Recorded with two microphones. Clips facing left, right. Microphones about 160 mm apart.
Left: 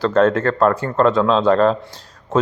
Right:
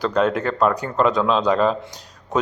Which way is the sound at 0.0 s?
15° right (ahead or behind).